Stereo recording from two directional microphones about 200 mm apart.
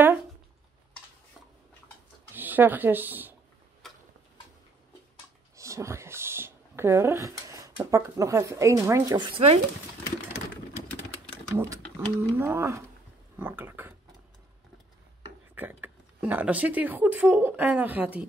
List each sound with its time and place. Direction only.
2.3 s speech: 10° right (ahead or behind)
3.8 s tick-tock: centre (ahead or behind)
5.6 s speech: 15° right (ahead or behind)
11.5 s speech: 15° right (ahead or behind)
15.2 s speech: 10° right (ahead or behind)